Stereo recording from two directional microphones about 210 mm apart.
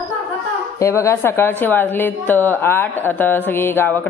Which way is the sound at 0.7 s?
15° left (ahead or behind).